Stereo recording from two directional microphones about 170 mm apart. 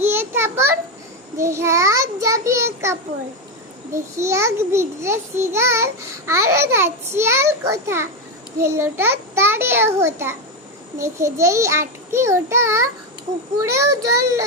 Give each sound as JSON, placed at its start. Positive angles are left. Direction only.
{"t": 0.0, "sound": "a child's voice", "side_deg": -15}